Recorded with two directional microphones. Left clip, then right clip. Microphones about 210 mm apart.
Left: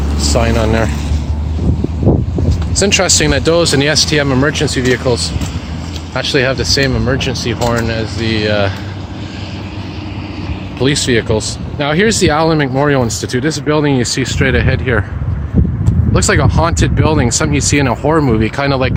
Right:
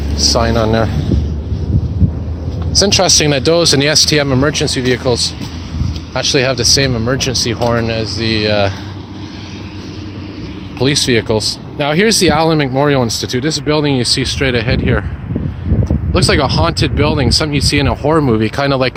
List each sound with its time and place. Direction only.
0.3 s speech: 15° right (ahead or behind)
3.2 s speech: 25° right (ahead or behind)
10.8 s speech: 25° right (ahead or behind)
16.1 s speech: 15° right (ahead or behind)